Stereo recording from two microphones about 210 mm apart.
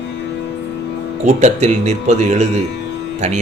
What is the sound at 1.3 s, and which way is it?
Speech, 35° right (ahead or behind).